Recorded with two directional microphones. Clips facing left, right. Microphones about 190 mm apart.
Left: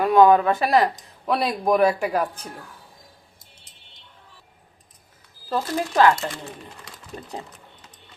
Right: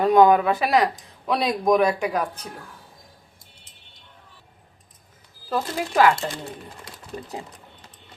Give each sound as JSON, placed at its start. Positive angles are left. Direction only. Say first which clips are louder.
{"t": 0.0, "sound": "speech", "louder": "even", "side_deg": -20}
{"t": 0.5, "sound": "speech", "louder": "left 1 dB", "side_deg": 0}
{"t": 5.5, "sound": "speech", "louder": "left 1 dB", "side_deg": -10}